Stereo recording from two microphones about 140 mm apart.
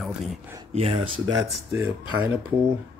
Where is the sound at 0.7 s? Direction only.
45° right (ahead or behind).